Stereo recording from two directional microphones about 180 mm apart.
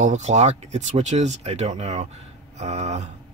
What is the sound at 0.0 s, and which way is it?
Speech, 40° right (ahead or behind).